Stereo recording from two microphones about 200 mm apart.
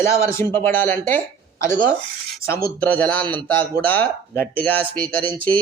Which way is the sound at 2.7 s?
10° left (ahead or behind).